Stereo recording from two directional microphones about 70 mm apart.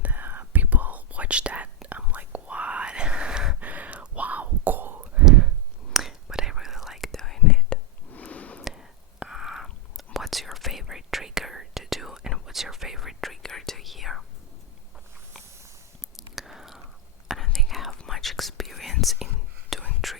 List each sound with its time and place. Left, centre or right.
0.0 s whispering: right
3.6 s whispering: right
5.2 s whispering: centre
7.1 s whispering: centre
7.7 s a sound: left
8.6 s whispering: centre
16.1 s whispering: centre